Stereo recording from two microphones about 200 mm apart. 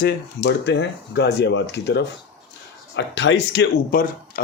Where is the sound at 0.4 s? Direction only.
60° left (ahead or behind).